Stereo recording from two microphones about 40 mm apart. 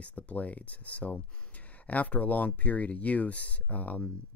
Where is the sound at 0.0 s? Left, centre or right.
Left.